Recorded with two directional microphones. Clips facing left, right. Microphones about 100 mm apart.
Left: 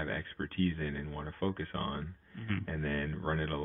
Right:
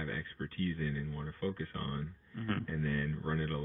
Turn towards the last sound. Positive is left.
turn(degrees=55)  # may be behind; listen again after turning